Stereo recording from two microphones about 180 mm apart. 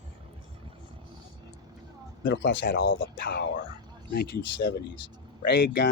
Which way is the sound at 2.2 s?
90° left.